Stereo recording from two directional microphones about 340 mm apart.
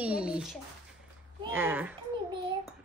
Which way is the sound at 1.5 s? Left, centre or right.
Centre.